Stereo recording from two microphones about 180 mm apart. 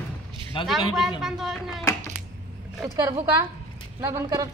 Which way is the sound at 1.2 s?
Centre (ahead or behind).